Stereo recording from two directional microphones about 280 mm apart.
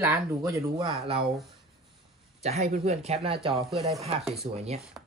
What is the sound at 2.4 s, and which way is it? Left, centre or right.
Speech, right.